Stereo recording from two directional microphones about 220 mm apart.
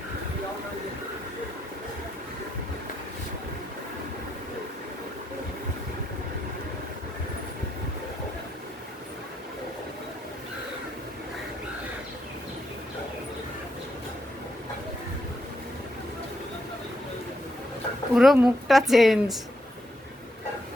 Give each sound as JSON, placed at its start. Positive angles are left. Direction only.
{"t": 18.1, "sound": "speech", "side_deg": 0}